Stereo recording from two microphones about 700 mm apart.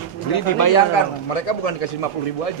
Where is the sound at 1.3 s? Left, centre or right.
Left.